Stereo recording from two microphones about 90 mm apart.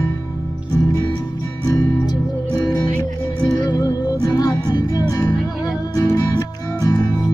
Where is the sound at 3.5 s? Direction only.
45° left (ahead or behind).